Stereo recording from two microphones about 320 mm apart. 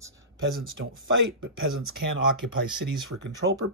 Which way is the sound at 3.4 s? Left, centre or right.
Right.